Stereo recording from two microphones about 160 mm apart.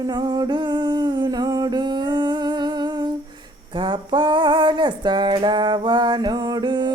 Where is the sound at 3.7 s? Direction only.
30° right (ahead or behind).